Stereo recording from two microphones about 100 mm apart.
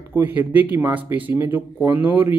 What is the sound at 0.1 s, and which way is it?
Speech, 20° right (ahead or behind).